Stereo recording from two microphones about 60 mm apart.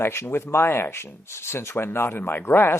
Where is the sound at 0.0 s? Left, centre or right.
Left.